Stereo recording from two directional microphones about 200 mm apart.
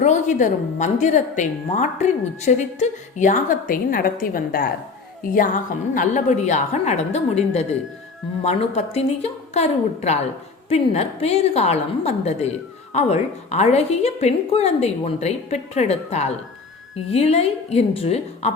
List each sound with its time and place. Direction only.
0.0 s a woman's voice: 35° left (ahead or behind)